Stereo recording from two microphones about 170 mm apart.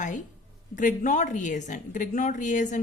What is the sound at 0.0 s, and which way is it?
A woman's voice, 45° left (ahead or behind).